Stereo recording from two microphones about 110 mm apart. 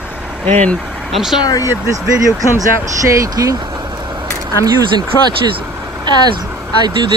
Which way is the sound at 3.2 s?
30° right (ahead or behind).